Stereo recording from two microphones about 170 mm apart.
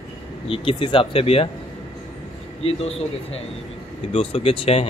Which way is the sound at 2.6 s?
35° left (ahead or behind).